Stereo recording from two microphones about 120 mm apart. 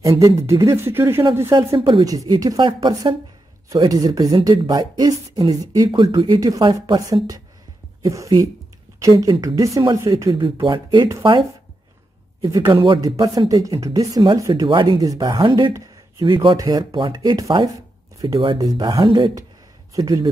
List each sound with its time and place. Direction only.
0.2 s speech: 25° right (ahead or behind)
1.8 s speech: 50° right (ahead or behind)
2.0 s speech: 30° right (ahead or behind)
8.0 s speech: 30° right (ahead or behind)
12.4 s speech: 30° right (ahead or behind)
12.7 s speech: 45° right (ahead or behind)
13.0 s speech: 30° right (ahead or behind)
19.9 s speech: 30° right (ahead or behind)